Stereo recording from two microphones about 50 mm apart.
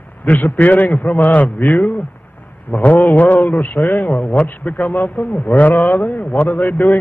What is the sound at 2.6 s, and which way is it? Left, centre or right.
A man's voice, left.